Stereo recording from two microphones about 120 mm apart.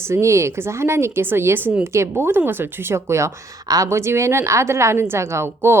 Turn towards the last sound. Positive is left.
turn(degrees=-20)  # may be behind; listen again after turning